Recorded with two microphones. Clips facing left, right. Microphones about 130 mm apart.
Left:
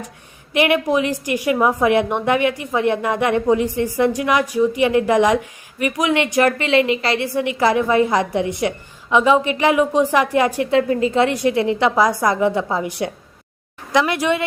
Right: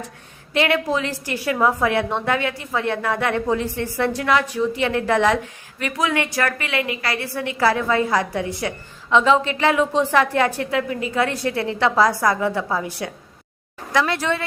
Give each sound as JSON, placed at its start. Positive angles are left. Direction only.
{"t": 0.5, "sound": "a woman's voice", "side_deg": 15}
{"t": 10.7, "sound": "a woman's voice", "side_deg": 30}